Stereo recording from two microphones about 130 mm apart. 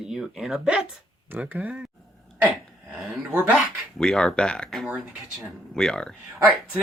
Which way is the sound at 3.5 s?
5° left (ahead or behind).